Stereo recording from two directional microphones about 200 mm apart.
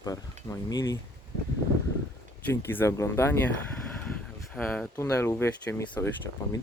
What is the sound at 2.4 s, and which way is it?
Speech, 10° left (ahead or behind).